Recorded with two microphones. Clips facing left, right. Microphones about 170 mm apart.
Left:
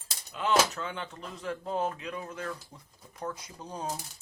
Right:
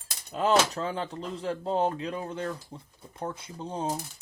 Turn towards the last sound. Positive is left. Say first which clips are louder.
# right 5 dB
turn(degrees=-25)  # may be behind; listen again after turning